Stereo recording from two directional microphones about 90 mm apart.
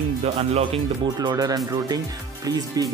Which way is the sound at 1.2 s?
45° right (ahead or behind).